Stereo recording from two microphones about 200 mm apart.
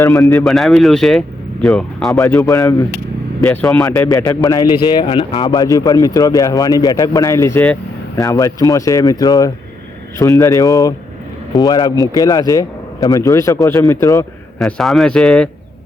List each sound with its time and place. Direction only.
0.4 s speech: centre (ahead or behind)
2.2 s speech: 15° left (ahead or behind)
3.9 s speech: 15° left (ahead or behind)
14.6 s speech: centre (ahead or behind)